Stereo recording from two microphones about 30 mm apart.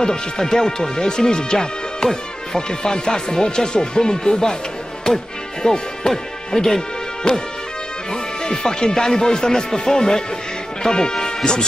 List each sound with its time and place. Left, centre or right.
0.0 s speech: left